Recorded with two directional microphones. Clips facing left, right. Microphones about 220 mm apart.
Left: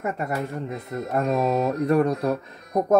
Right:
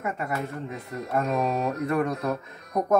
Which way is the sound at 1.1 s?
35° left (ahead or behind).